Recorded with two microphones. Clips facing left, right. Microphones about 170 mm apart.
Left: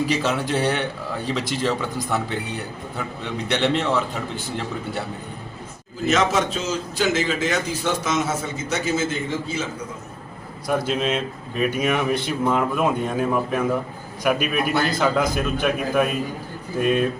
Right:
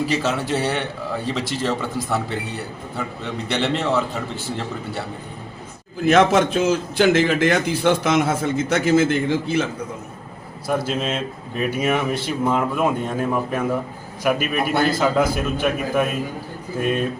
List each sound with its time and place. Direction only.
0.1 s speech: centre (ahead or behind)
3.5 s speech: centre (ahead or behind)
6.1 s a man's voice: 55° right (ahead or behind)
10.7 s speech: centre (ahead or behind)